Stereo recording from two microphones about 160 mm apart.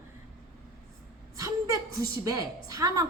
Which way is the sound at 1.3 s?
20° right (ahead or behind).